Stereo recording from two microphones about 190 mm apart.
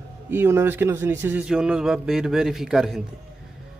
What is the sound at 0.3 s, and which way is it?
Speech, 10° right (ahead or behind).